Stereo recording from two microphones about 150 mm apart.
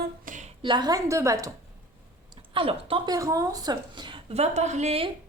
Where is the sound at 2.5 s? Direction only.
40° right (ahead or behind).